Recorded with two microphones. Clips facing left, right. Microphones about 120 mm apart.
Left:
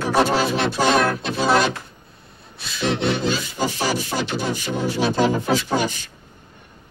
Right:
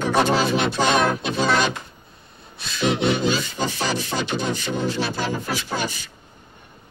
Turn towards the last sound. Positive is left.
turn(degrees=20)  # may be behind; listen again after turning